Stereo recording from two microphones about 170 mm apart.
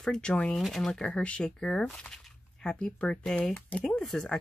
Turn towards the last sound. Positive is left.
turn(degrees=5)  # may be behind; listen again after turning